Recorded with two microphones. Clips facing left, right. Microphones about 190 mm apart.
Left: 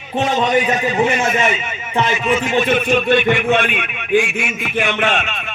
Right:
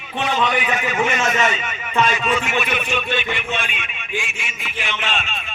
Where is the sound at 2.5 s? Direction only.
40° left (ahead or behind).